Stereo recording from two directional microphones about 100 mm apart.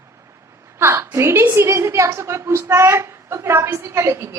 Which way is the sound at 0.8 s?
25° right (ahead or behind).